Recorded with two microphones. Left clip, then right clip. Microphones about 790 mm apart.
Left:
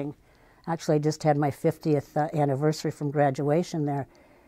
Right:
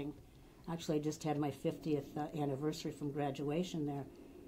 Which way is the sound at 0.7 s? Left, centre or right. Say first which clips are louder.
Left 13 dB; left.